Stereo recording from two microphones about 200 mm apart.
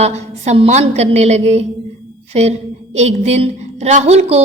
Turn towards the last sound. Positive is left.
turn(degrees=-30)  # may be behind; listen again after turning